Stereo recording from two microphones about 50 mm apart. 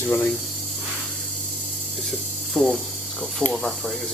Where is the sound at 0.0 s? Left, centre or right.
Left.